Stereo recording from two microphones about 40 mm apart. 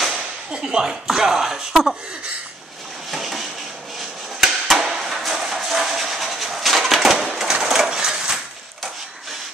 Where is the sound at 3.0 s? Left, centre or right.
Centre.